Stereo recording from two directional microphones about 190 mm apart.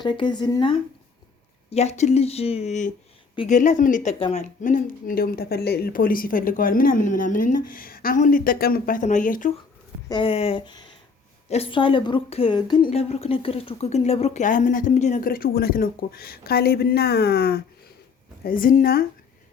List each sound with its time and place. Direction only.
0.0 s a woman's voice: 25° left (ahead or behind); by 9.5 s 45° left (ahead or behind)
10.1 s a woman's voice: 30° left (ahead or behind); by 19.0 s 50° left (ahead or behind)